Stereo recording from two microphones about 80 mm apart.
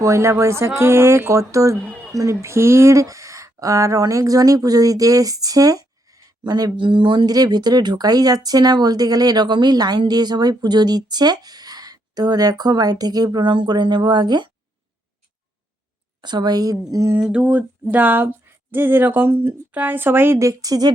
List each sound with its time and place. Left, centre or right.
0.0 s speech: right
6.8 s speech: right
7.3 s speech: right
13.4 s speech: right
16.2 s speech: right
16.9 s speech: right
17.2 s a sound: centre; by 20.4 s right
20.4 s speech: right